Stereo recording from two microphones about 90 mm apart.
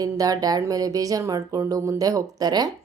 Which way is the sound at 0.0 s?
45° right (ahead or behind).